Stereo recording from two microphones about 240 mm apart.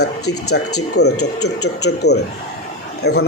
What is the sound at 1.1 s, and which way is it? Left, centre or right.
Speech, left.